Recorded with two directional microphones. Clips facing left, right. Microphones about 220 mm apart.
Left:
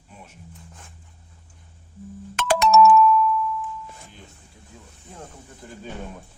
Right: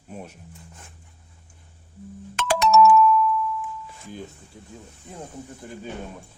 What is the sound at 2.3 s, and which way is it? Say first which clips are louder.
Ringtone: left 1 dB; 55° left (ahead or behind).